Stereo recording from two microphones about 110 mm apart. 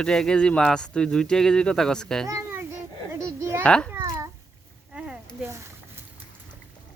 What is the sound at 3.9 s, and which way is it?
Babbling, 25° right (ahead or behind).